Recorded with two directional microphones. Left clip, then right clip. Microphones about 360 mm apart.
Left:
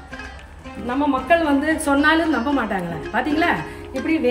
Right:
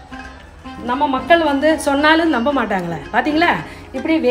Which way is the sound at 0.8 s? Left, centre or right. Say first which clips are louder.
Right 4 dB; centre.